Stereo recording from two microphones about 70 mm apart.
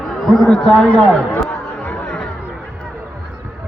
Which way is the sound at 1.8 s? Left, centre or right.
Centre.